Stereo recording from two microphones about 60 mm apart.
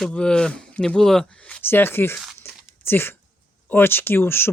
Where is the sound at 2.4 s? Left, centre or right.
Left.